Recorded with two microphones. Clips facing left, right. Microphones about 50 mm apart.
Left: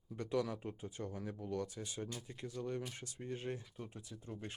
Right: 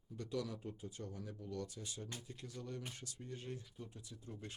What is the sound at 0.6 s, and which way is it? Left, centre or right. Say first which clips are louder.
Speech: left 3 dB; left.